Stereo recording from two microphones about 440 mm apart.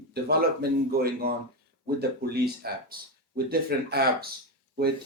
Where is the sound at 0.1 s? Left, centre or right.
Right.